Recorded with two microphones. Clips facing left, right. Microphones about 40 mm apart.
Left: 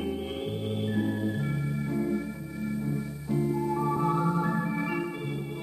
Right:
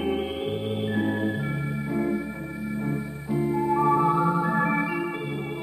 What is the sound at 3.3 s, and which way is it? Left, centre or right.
Music, right.